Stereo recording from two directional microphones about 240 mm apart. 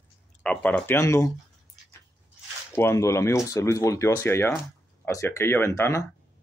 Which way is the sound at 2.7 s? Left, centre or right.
Centre.